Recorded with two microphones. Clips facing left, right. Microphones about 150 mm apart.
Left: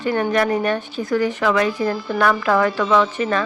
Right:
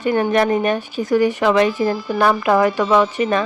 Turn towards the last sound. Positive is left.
turn(degrees=-20)  # may be behind; listen again after turning